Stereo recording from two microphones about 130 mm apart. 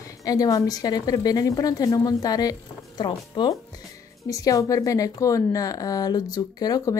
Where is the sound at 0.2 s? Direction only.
25° left (ahead or behind).